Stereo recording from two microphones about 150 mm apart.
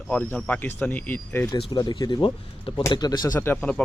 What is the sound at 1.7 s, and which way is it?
Speech, 25° left (ahead or behind).